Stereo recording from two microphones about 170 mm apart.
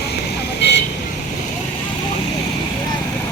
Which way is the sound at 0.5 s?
80° left.